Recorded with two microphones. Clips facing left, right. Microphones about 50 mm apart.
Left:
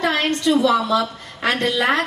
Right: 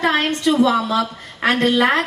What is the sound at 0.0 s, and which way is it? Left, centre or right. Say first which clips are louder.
A woman's voice: right 2 dB; right.